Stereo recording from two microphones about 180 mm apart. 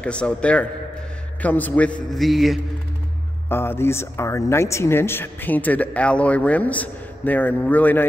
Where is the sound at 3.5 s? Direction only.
15° left (ahead or behind).